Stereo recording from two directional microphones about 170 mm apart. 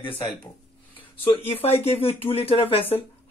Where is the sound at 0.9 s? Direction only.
35° left (ahead or behind).